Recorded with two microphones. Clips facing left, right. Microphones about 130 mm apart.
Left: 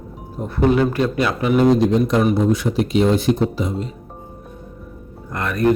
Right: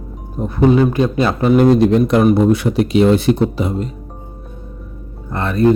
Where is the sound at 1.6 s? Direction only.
65° right (ahead or behind).